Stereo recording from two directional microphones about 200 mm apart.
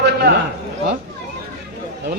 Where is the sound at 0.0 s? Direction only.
55° right (ahead or behind).